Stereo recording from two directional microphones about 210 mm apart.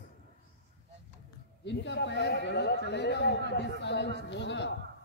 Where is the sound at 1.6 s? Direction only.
55° left (ahead or behind).